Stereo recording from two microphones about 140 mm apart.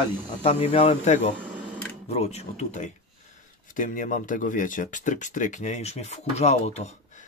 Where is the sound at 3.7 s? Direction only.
75° left (ahead or behind).